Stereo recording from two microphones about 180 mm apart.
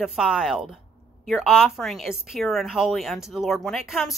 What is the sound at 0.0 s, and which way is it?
A woman's voice, 5° right (ahead or behind).